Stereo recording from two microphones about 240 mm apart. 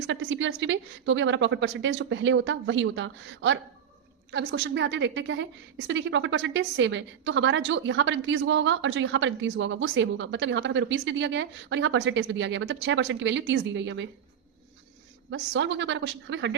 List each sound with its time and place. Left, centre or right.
0.1 s a woman's voice: right
15.3 s a woman's voice: right